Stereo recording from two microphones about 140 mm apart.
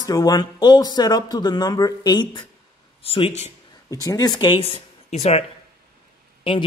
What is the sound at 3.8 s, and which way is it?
Speech, 25° left (ahead or behind).